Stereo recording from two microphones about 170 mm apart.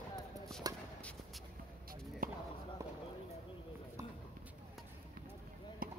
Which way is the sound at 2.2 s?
55° right (ahead or behind).